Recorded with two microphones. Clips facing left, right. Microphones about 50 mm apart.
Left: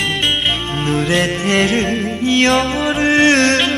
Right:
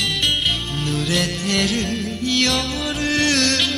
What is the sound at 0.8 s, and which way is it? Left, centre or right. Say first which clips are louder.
Music: left 6 dB; left.